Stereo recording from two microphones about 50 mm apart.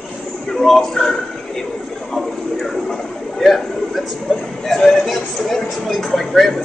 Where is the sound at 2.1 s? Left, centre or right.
Centre.